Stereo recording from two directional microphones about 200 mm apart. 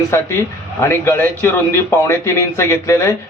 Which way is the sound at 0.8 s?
10° left (ahead or behind).